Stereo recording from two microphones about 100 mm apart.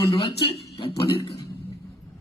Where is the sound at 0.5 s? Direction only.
65° left (ahead or behind).